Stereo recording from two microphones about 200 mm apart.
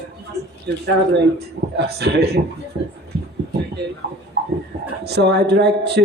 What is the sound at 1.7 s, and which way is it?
Speech, 55° right (ahead or behind).